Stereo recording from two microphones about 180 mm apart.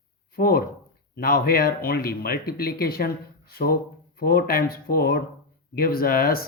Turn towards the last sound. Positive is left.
turn(degrees=55)  # may be behind; listen again after turning